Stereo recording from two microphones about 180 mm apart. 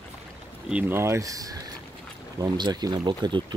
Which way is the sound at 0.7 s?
15° right (ahead or behind).